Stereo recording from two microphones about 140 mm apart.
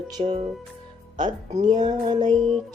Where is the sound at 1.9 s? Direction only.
30° right (ahead or behind).